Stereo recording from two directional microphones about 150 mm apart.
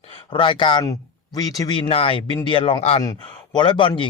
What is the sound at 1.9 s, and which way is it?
Speech, 40° left (ahead or behind).